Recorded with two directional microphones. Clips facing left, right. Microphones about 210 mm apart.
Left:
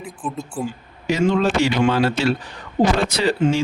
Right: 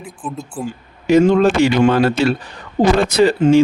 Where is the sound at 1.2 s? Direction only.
50° right (ahead or behind).